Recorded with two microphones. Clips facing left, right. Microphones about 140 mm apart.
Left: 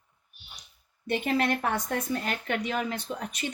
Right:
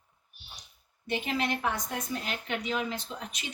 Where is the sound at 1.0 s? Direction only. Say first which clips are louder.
Left 4 dB; 55° left (ahead or behind).